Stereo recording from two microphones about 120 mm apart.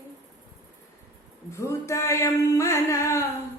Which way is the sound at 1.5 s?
25° left (ahead or behind).